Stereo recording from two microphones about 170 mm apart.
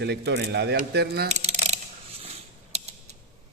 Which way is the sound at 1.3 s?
40° right (ahead or behind).